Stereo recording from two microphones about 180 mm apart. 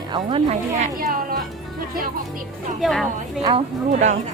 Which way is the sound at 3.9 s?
40° right (ahead or behind).